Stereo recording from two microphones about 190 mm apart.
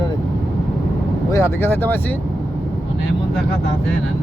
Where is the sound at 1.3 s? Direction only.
15° left (ahead or behind).